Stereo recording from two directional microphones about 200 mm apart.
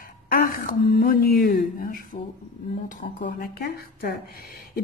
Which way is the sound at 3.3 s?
45° left (ahead or behind).